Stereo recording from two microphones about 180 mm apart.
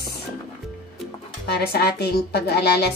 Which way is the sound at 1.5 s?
60° left (ahead or behind).